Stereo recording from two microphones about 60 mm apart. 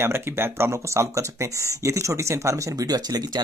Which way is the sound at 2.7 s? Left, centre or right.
Right.